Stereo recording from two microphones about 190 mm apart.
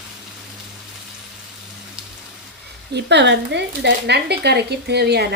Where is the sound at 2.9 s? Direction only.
65° right (ahead or behind).